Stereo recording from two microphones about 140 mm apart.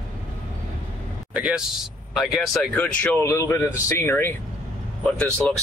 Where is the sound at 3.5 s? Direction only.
20° left (ahead or behind).